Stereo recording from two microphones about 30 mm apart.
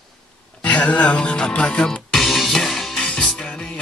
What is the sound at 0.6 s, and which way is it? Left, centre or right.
Speech, left.